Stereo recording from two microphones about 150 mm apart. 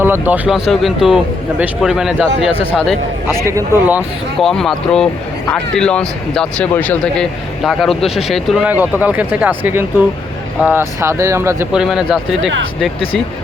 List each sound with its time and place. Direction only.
0.0 s speech: 10° right (ahead or behind); by 3.0 s 5° left (ahead or behind)
3.4 s speech: 15° right (ahead or behind)
4.4 s speech: centre (ahead or behind)
8.6 s speech: 10° right (ahead or behind)
11.7 s speech: 5° right (ahead or behind)